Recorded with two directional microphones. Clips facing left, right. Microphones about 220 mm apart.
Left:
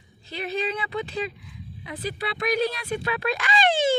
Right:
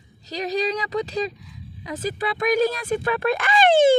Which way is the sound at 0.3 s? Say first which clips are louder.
Right 4 dB; 40° right (ahead or behind).